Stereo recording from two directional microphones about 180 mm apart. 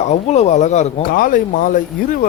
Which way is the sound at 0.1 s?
40° left (ahead or behind).